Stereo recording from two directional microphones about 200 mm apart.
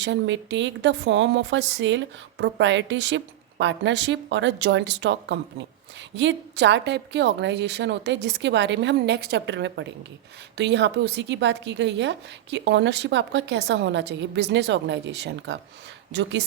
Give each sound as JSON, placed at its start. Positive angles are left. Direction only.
{"t": 0.0, "sound": "a woman's voice", "side_deg": -65}